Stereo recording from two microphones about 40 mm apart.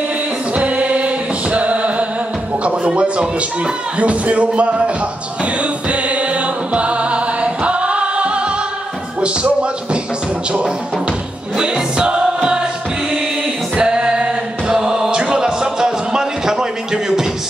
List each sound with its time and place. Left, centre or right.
0.6 s music: right
2.6 s speech: right
5.4 s music: right
9.2 s speech: right
11.5 s music: right
13.7 s music: right